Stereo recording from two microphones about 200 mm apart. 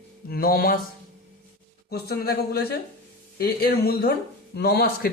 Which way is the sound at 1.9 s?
50° left (ahead or behind).